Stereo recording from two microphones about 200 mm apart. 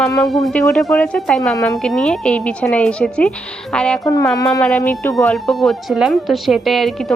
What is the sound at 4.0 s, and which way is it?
Speech, 15° left (ahead or behind).